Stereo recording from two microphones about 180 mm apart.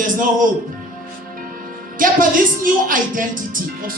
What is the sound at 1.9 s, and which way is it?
Speech, 50° right (ahead or behind).